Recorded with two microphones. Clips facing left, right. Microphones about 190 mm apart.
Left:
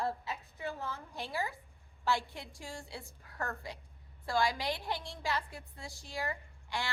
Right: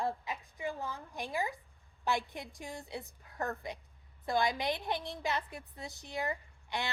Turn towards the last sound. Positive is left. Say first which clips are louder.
# right 1 dB
turn(degrees=-20)  # may be behind; listen again after turning